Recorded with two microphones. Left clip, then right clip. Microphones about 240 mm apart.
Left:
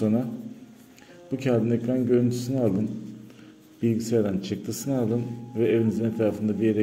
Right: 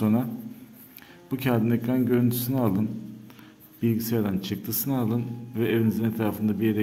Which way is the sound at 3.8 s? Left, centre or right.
Centre.